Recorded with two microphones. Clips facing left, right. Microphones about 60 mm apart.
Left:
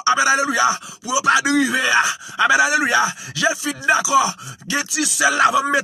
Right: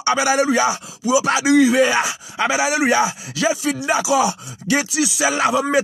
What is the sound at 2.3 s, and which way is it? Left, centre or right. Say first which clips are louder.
Speech: left 4 dB; left.